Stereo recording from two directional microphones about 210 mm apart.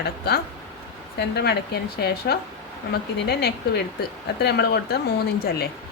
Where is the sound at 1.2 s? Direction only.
50° left (ahead or behind).